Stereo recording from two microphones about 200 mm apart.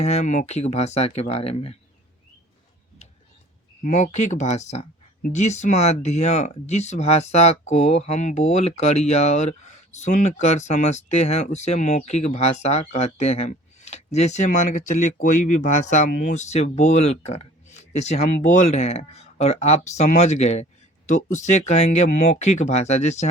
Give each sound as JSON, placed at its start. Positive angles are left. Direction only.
{"t": 0.0, "sound": "speech", "side_deg": 35}
{"t": 3.8, "sound": "speech", "side_deg": 35}